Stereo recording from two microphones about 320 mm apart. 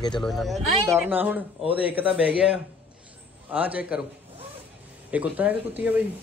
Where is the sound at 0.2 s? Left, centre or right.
Centre.